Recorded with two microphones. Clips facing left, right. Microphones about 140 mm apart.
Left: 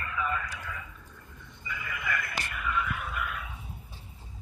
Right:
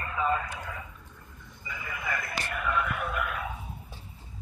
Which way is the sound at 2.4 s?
50° right (ahead or behind).